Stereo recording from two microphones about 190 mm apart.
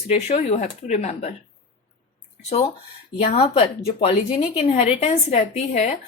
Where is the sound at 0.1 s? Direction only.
35° left (ahead or behind).